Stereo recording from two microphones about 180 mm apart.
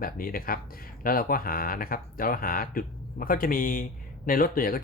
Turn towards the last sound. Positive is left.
turn(degrees=50)  # may be behind; listen again after turning